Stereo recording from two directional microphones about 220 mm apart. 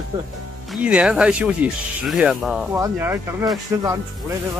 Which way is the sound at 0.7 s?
5° right (ahead or behind).